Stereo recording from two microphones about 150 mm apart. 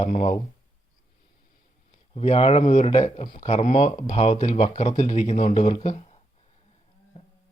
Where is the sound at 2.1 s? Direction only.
45° left (ahead or behind).